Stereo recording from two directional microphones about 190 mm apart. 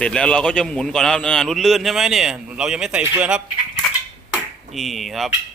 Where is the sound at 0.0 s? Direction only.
5° left (ahead or behind).